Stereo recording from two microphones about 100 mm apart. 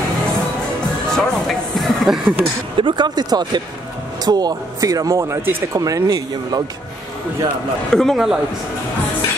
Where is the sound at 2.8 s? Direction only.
45° right (ahead or behind).